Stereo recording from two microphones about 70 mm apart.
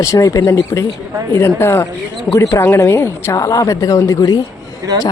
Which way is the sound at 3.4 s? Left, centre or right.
Left.